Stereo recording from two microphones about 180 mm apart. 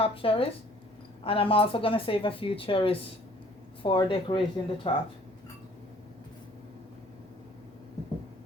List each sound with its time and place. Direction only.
0.0 s speech: 30° left (ahead or behind)